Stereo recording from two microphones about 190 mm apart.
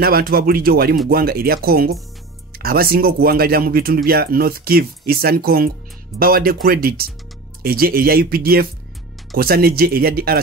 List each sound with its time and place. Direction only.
0.0 s speech: 50° right (ahead or behind)